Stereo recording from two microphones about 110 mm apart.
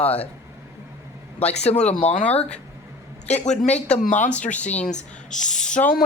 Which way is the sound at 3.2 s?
90° left.